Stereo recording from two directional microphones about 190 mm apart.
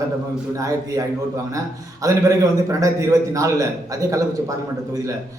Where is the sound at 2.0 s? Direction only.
20° right (ahead or behind).